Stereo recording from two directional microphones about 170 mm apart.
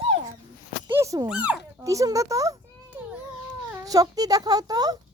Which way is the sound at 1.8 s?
20° right (ahead or behind).